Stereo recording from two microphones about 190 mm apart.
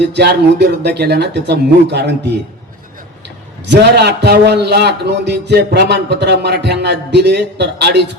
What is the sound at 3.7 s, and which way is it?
A man's voice, 60° right (ahead or behind).